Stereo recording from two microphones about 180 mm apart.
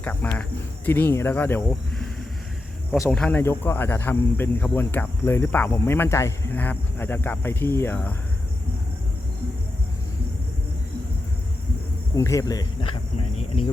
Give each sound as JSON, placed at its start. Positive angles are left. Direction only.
{"t": 0.0, "sound": "speech", "side_deg": 10}
{"t": 3.1, "sound": "speech", "side_deg": 5}
{"t": 12.1, "sound": "speech", "side_deg": 15}